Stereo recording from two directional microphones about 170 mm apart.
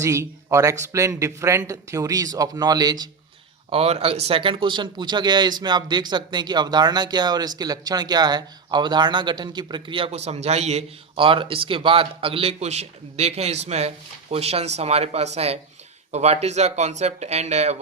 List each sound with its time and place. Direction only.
0.0 s speech: 15° right (ahead or behind)
3.7 s speech: 35° right (ahead or behind)